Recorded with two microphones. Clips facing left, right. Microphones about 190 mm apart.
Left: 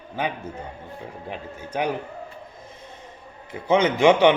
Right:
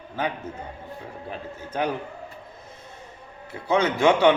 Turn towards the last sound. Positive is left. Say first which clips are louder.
# left 2 dB
turn(degrees=20)  # may be behind; listen again after turning